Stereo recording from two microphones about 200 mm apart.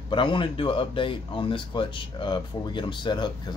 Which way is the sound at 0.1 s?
25° left (ahead or behind).